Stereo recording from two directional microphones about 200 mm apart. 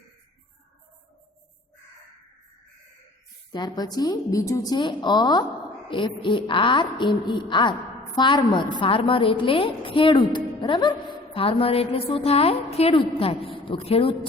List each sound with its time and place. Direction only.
3.5 s a woman's voice: 20° left (ahead or behind)